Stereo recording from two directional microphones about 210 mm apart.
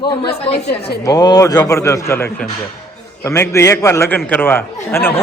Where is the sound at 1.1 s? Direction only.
20° left (ahead or behind).